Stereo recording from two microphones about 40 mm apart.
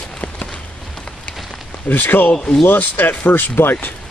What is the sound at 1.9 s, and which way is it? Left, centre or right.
Speech, left.